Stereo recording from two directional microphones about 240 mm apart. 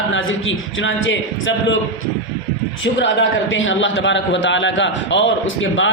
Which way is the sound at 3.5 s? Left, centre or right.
Left.